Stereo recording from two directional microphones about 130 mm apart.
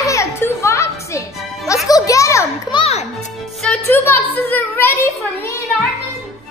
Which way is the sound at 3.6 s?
5° left (ahead or behind).